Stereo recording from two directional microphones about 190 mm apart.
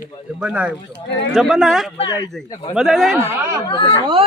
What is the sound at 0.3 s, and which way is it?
Speech, 5° right (ahead or behind).